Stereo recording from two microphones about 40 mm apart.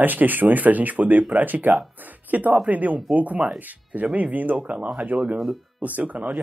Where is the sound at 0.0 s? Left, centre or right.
Right.